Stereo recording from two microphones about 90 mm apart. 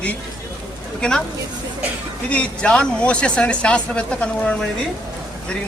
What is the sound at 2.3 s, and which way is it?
Speech, 15° left (ahead or behind).